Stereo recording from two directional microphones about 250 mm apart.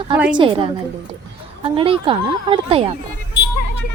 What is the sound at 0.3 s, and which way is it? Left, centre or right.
Speech, right.